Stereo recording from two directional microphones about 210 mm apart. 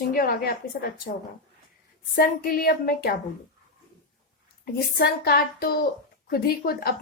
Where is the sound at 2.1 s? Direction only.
45° left (ahead or behind).